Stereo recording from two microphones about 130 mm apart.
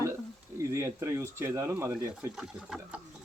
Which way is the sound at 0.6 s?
20° right (ahead or behind).